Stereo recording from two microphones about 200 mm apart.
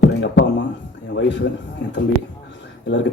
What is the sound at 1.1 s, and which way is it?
Speech, 60° left (ahead or behind).